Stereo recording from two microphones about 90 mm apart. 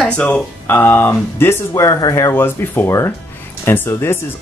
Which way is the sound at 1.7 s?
40° left (ahead or behind).